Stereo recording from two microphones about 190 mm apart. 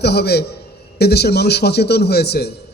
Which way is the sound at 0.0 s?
60° left (ahead or behind).